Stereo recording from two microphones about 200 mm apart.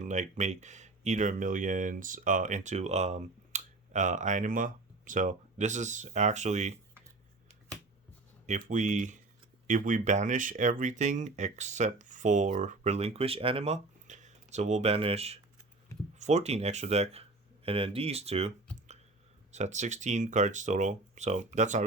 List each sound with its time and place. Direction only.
0.0 s speech: 35° right (ahead or behind)
8.4 s speech: 40° right (ahead or behind)